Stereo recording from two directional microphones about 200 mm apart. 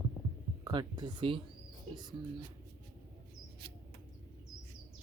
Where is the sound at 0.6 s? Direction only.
20° right (ahead or behind).